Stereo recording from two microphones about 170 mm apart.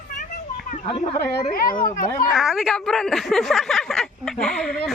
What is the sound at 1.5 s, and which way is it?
Speech, 55° left (ahead or behind).